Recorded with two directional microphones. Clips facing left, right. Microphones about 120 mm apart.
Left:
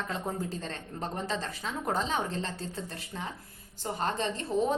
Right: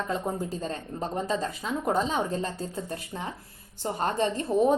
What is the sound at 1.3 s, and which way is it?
A woman's voice, 10° right (ahead or behind).